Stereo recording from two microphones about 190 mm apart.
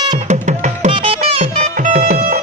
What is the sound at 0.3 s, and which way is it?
Music, 40° right (ahead or behind).